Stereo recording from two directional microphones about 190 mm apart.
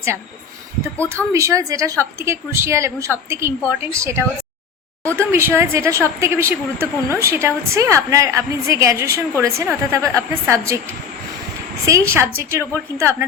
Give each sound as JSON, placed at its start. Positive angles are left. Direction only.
{"t": 0.9, "sound": "a woman's voice", "side_deg": -15}
{"t": 5.3, "sound": "a woman's voice", "side_deg": -15}
{"t": 11.9, "sound": "a woman's voice", "side_deg": -15}